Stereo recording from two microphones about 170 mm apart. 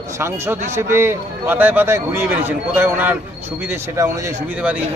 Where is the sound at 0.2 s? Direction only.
15° right (ahead or behind).